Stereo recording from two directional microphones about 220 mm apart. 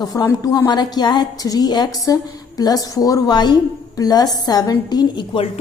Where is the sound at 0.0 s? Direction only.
15° left (ahead or behind).